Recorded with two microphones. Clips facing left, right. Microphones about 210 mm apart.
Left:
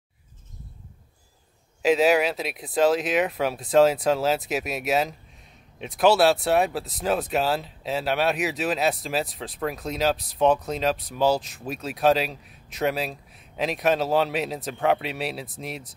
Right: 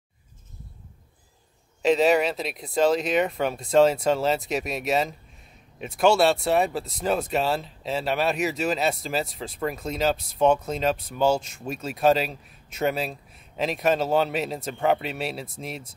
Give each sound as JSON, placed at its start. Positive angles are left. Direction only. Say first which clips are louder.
{"t": 1.8, "sound": "speech", "louder": "even", "side_deg": 0}